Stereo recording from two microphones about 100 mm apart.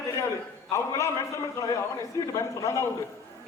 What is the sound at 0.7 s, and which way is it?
A man's voice, 30° left (ahead or behind).